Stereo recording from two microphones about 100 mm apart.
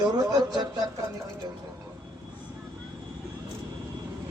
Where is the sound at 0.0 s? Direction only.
40° right (ahead or behind).